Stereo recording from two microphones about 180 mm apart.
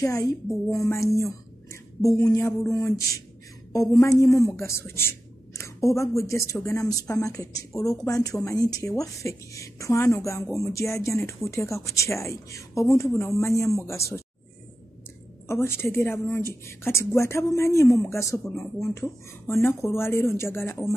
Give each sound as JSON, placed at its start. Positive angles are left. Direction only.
{"t": 0.0, "sound": "a woman's voice", "side_deg": 20}
{"t": 1.2, "sound": "a sound", "side_deg": 15}
{"t": 3.9, "sound": "a woman's voice", "side_deg": 20}
{"t": 8.0, "sound": "a sound", "side_deg": 20}
{"t": 8.5, "sound": "a woman's voice", "side_deg": 20}
{"t": 15.4, "sound": "a woman's voice", "side_deg": 15}